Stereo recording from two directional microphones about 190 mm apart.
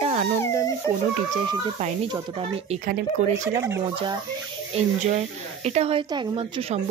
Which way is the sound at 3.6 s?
15° right (ahead or behind).